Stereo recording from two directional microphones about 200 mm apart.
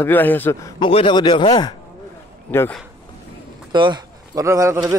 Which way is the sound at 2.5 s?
10° left (ahead or behind).